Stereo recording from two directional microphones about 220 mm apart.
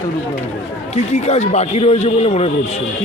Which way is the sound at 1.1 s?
30° left (ahead or behind).